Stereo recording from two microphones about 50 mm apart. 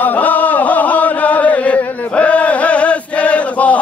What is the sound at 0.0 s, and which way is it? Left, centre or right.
Chant, left.